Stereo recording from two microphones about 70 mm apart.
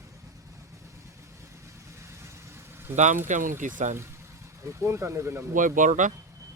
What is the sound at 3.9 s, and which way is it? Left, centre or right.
Speech, right.